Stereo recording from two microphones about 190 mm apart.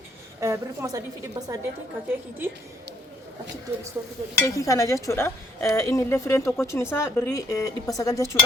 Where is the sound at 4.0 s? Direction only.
15° right (ahead or behind).